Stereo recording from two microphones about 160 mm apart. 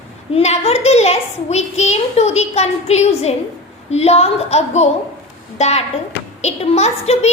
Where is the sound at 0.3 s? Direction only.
40° left (ahead or behind).